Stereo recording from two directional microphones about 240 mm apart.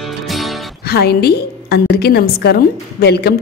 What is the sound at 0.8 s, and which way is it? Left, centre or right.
A woman's voice, left.